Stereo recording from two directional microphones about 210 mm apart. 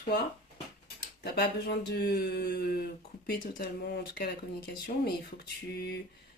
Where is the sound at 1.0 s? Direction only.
50° left (ahead or behind).